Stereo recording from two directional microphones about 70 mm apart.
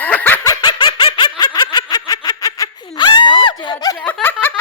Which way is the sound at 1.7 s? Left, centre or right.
Left.